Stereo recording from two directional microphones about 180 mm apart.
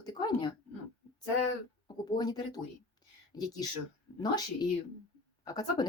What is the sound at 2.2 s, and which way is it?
Speech, 25° left (ahead or behind).